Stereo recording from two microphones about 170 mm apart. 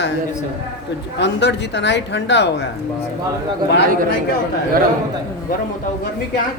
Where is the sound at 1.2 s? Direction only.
90° left.